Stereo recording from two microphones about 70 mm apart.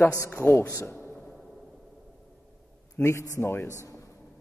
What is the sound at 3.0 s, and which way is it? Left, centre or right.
Speech, left.